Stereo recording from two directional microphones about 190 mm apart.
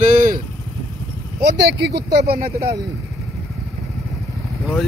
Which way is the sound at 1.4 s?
65° right (ahead or behind).